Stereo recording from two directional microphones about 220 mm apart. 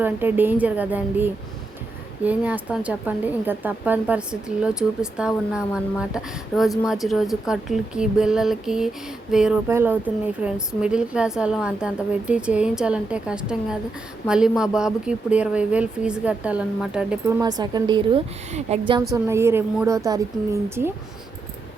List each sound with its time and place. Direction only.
0.0 s a woman's voice: 10° right (ahead or behind)
17.4 s a woman's voice: 20° right (ahead or behind)
19.1 s a woman's voice: 10° right (ahead or behind)